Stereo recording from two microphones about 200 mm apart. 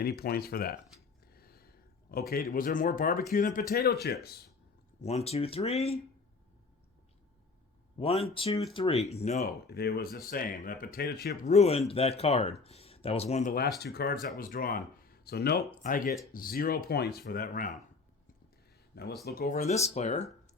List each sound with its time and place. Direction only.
0.0 s speech: 50° left (ahead or behind)
1.3 s a sound: 50° left (ahead or behind)
3.3 s speech: 45° left (ahead or behind)
4.9 s speech: 35° left (ahead or behind)
7.9 s speech: 30° left (ahead or behind)
9.6 s speech: 50° left (ahead or behind)
11.4 s speech: 35° left (ahead or behind)
19.2 s speech: 50° left (ahead or behind)